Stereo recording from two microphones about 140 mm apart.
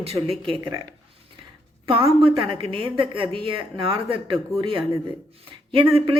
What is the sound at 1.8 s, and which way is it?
Speech, 40° right (ahead or behind).